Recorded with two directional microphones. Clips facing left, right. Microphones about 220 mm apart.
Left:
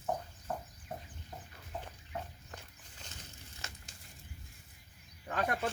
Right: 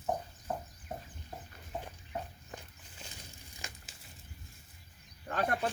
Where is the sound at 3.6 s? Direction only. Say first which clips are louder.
Right 2 dB; 15° right (ahead or behind).